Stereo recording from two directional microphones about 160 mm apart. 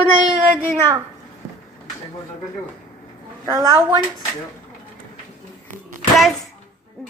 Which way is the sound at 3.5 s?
25° right (ahead or behind).